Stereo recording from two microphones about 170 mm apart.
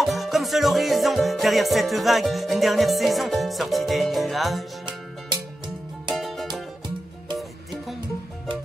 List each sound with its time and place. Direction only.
0.0 s music: centre (ahead or behind)
6.1 s music: centre (ahead or behind)